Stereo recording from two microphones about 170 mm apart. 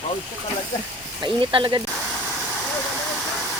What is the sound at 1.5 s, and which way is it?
Speech, 25° right (ahead or behind).